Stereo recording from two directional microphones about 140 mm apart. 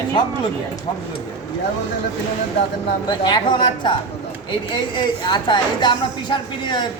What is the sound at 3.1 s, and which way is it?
Speech, 30° left (ahead or behind).